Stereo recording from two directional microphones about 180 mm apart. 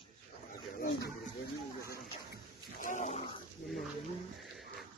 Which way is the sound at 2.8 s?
45° left (ahead or behind).